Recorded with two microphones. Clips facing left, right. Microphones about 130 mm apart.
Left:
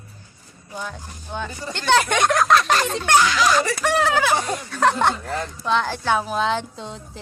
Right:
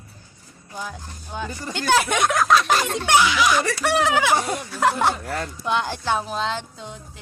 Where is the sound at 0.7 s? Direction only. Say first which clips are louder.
Left 1 dB; 5° right (ahead or behind).